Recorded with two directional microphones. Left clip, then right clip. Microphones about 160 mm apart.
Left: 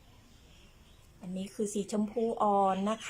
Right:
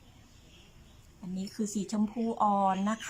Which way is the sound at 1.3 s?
20° left (ahead or behind).